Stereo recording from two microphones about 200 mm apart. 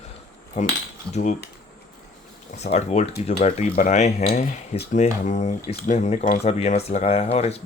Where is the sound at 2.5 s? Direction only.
35° left (ahead or behind).